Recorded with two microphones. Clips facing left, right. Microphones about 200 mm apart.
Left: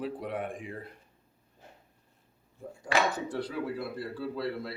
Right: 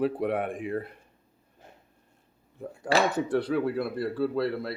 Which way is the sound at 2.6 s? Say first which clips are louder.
Right 4 dB; 65° right (ahead or behind).